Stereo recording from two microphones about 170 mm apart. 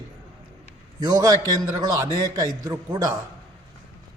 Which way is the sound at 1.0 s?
20° right (ahead or behind).